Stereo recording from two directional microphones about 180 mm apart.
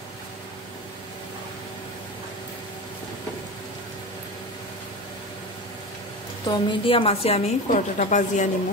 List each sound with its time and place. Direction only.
6.5 s a woman's voice: 30° left (ahead or behind); by 8.5 s 45° left (ahead or behind)